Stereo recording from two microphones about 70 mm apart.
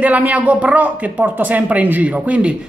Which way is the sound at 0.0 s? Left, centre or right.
Right.